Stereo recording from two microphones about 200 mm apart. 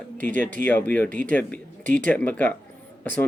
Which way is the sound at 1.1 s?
40° right (ahead or behind).